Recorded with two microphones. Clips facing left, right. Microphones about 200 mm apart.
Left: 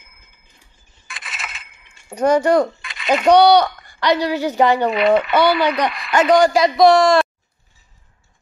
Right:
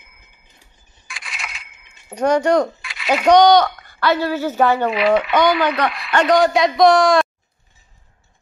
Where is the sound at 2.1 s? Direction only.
10° left (ahead or behind).